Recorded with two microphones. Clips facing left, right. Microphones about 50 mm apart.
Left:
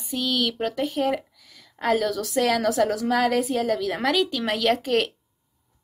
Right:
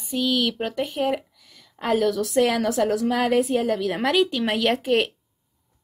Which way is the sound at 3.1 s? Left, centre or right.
Centre.